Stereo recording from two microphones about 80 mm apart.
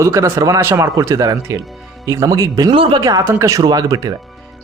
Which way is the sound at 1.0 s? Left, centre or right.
Right.